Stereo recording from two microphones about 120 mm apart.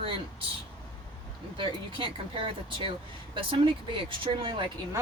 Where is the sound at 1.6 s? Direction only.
45° right (ahead or behind).